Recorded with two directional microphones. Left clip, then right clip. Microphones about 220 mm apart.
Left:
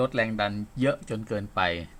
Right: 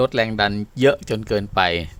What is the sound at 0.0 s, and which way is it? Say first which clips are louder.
Speech: right 7 dB; 55° right (ahead or behind).